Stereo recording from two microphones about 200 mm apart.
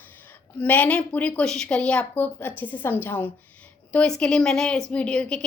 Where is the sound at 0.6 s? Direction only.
5° left (ahead or behind).